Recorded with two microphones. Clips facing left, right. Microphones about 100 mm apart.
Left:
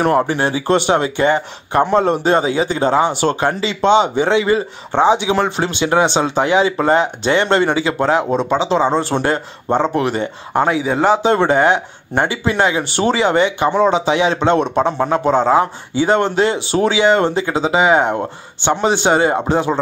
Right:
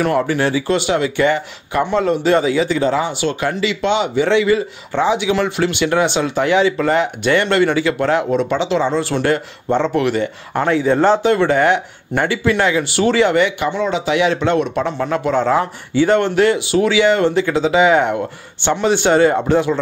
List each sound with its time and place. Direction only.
0.0 s speech: 35° left (ahead or behind)
10.7 s speech: 10° left (ahead or behind)
11.2 s speech: 25° left (ahead or behind)